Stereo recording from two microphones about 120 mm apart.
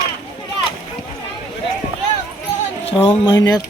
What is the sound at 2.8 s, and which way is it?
Speech, 50° left (ahead or behind).